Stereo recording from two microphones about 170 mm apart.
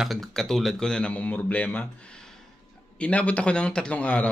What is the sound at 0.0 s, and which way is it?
A man's voice, centre (ahead or behind).